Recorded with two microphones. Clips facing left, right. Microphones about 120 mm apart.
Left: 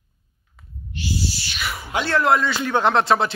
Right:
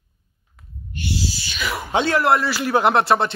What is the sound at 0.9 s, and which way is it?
Owl, 65° right (ahead or behind).